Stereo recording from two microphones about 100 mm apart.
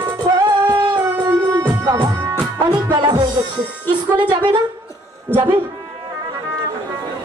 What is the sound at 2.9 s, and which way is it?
Music, 45° right (ahead or behind).